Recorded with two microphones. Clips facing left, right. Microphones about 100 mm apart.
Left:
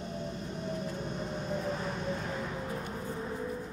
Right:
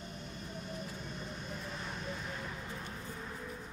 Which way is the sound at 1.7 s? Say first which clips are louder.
Left 8 dB; 40° left (ahead or behind).